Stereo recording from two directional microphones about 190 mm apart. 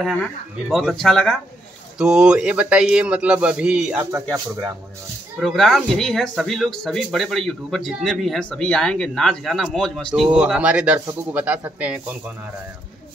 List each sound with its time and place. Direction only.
0.0 s speech: 5° left (ahead or behind)
4.0 s a man's voice: 15° right (ahead or behind)
5.4 s a man's voice: centre (ahead or behind)